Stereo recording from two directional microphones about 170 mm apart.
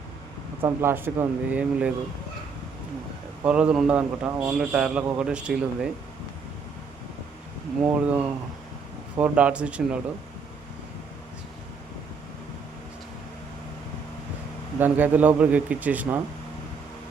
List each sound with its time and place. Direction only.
0.6 s a man's voice: 15° right (ahead or behind)
3.4 s a man's voice: 5° right (ahead or behind)
7.8 s a man's voice: 5° right (ahead or behind)
9.1 s a man's voice: 10° right (ahead or behind)
14.8 s a man's voice: 10° right (ahead or behind)